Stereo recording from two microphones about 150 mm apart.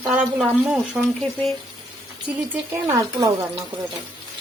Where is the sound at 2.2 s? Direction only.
15° right (ahead or behind).